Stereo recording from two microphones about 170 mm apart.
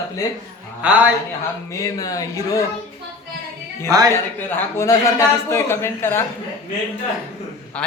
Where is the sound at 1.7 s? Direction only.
20° left (ahead or behind).